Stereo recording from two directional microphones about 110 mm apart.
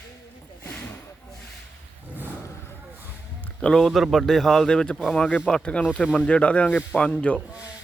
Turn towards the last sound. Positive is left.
turn(degrees=10)  # may be behind; listen again after turning